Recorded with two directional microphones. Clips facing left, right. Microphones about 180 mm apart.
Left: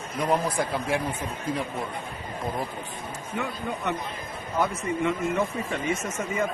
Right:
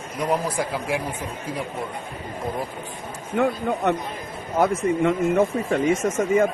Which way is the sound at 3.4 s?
55° right (ahead or behind).